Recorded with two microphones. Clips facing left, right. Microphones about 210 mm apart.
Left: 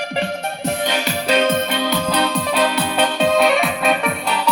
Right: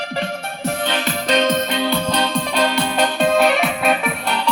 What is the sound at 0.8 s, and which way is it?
Music, 10° left (ahead or behind).